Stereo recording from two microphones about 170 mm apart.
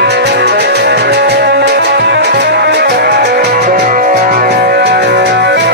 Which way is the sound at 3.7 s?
55° right (ahead or behind).